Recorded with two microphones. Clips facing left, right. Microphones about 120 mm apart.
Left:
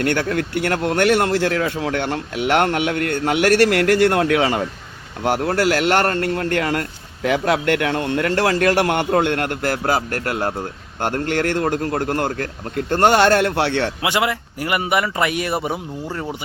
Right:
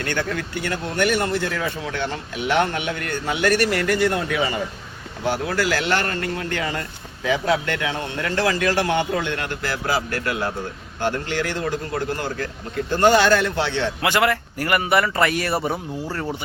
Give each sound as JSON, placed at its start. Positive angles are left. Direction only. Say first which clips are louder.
{"t": 0.0, "sound": "speech", "louder": "left 5 dB", "side_deg": 60}
{"t": 5.2, "sound": "a man's voice", "louder": "left 4 dB", "side_deg": 60}
{"t": 14.0, "sound": "a man's voice", "louder": "right 1 dB", "side_deg": 15}